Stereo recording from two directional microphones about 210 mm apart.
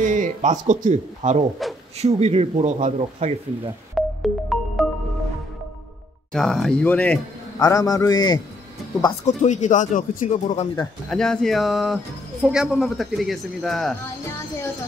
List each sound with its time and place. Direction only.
0.0 s speech: 40° right (ahead or behind)
1.6 s a sound: centre (ahead or behind)
2.0 s speech: 30° right (ahead or behind)
3.9 s music: centre (ahead or behind)
6.3 s a man's voice: centre (ahead or behind); by 8.4 s 20° left (ahead or behind)
9.2 s speech: 35° left (ahead or behind)
11.1 s a man's voice: 5° left (ahead or behind)